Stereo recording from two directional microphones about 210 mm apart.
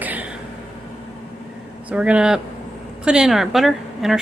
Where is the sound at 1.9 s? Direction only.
5° right (ahead or behind).